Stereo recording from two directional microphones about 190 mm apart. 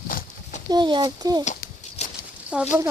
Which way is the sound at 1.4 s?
35° left (ahead or behind).